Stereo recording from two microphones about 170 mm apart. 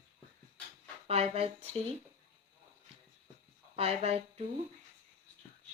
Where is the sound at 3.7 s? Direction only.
35° right (ahead or behind).